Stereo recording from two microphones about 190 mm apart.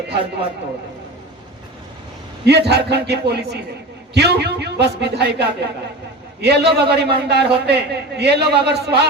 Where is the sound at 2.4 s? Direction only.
60° right (ahead or behind).